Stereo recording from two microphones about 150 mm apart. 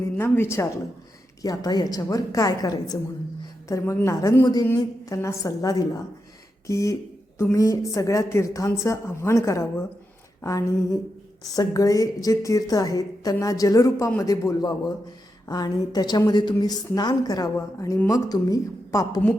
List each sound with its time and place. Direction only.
0.2 s a woman's voice: 15° left (ahead or behind)
11.4 s a woman's voice: 25° left (ahead or behind)